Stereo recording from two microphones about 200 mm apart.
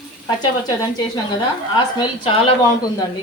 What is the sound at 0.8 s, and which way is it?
Speech, 20° left (ahead or behind).